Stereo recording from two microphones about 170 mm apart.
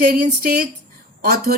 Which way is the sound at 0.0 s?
60° right (ahead or behind).